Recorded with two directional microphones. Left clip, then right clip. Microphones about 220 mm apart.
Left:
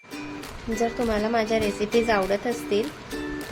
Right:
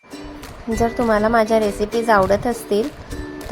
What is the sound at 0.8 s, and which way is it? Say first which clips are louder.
A woman's voice: right 8 dB; 25° right (ahead or behind).